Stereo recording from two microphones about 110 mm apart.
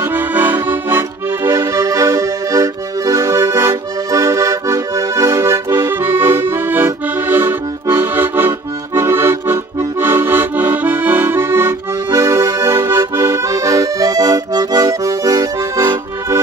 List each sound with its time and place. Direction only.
0.0 s accordion: 15° right (ahead or behind); by 16.0 s 35° right (ahead or behind)